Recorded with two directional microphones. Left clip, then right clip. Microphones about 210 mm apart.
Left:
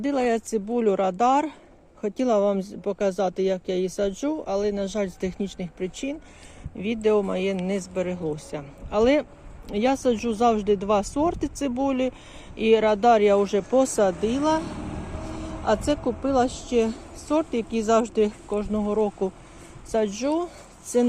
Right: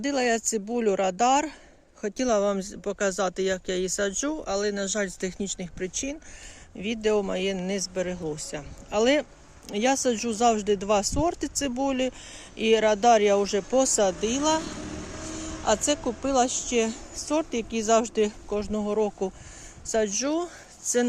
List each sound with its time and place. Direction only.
0.0 s speech: 10° right (ahead or behind)
7.9 s speech: 45° right (ahead or behind)
8.2 s speech: 10° right (ahead or behind)
14.8 s vehicle: 50° right (ahead or behind)
15.6 s speech: 5° right (ahead or behind)